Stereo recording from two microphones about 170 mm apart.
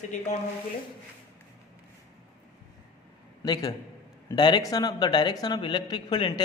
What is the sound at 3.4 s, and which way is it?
A man's voice, 25° left (ahead or behind).